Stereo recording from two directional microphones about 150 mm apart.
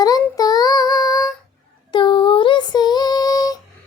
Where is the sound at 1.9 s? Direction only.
35° left (ahead or behind).